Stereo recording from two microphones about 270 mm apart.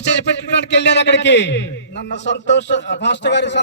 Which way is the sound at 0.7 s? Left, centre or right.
Left.